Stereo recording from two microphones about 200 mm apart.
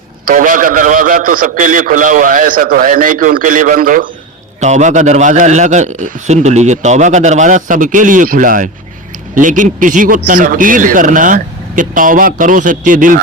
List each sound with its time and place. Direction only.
0.3 s a man's voice: 40° right (ahead or behind)